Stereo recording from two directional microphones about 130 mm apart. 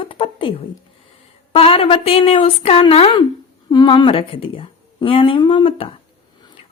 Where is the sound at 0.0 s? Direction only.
40° left (ahead or behind).